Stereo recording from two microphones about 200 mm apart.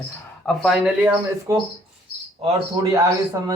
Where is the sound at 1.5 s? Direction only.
15° right (ahead or behind).